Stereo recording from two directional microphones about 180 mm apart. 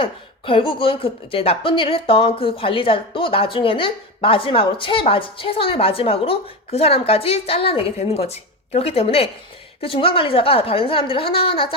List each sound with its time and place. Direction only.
0.0 s speech: 30° left (ahead or behind)